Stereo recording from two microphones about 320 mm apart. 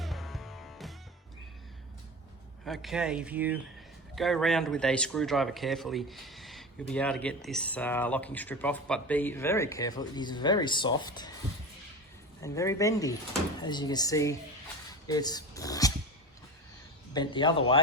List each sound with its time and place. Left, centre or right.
0.0 s music: centre
2.6 s speech: centre
12.4 s speech: centre
17.2 s speech: centre